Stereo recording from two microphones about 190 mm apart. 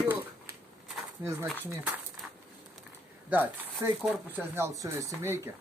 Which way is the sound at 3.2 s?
10° right (ahead or behind).